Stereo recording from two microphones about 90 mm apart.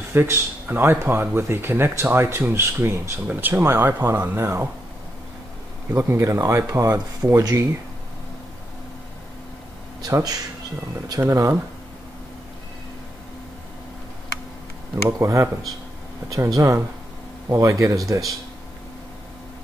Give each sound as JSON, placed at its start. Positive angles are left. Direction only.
{"t": 0.1, "sound": "speech", "side_deg": -25}
{"t": 5.9, "sound": "speech", "side_deg": -25}
{"t": 10.0, "sound": "speech", "side_deg": -40}
{"t": 15.0, "sound": "speech", "side_deg": -35}